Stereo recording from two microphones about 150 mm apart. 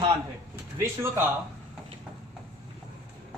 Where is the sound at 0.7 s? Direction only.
15° right (ahead or behind).